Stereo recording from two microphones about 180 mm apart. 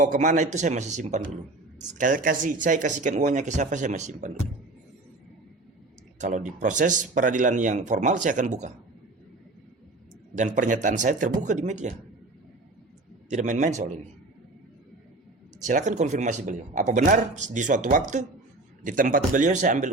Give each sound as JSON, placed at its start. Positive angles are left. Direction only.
{"t": 0.0, "sound": "speech", "side_deg": -45}
{"t": 6.1, "sound": "speech", "side_deg": -45}
{"t": 10.3, "sound": "speech", "side_deg": -45}
{"t": 13.3, "sound": "speech", "side_deg": -40}
{"t": 15.6, "sound": "speech", "side_deg": -45}